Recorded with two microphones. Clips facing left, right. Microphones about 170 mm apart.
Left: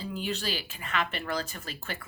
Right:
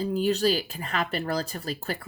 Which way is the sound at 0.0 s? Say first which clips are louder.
Right 10 dB; 40° right (ahead or behind).